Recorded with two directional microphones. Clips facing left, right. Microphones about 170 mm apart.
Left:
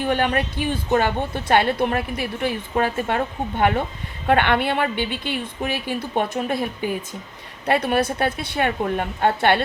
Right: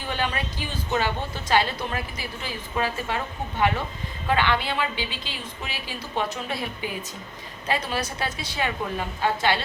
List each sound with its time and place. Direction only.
0.0 s a woman's voice: 60° left (ahead or behind)
7.7 s a woman's voice: 60° left (ahead or behind)